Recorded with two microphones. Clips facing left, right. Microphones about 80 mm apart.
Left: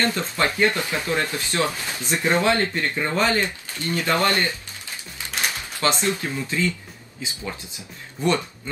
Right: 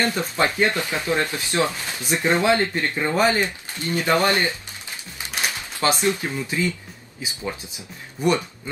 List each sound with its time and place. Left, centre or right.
0.0 s speech: centre
5.3 s music: centre
6.0 s speech: centre